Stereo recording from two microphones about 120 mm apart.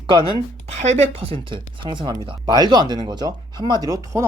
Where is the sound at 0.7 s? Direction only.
70° right (ahead or behind).